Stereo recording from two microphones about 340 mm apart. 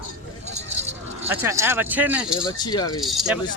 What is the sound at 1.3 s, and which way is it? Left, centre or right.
Speech, centre.